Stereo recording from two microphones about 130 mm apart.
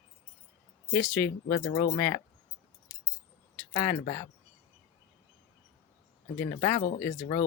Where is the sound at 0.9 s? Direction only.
15° left (ahead or behind).